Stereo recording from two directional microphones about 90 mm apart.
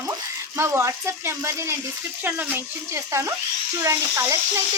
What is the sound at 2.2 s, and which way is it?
A child's voice, 20° right (ahead or behind).